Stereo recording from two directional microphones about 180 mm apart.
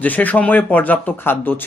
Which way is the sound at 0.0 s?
10° left (ahead or behind).